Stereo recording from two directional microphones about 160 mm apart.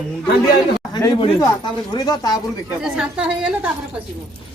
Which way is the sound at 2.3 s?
5° right (ahead or behind).